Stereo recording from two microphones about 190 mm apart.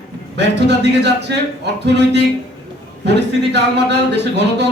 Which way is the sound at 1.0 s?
65° right (ahead or behind).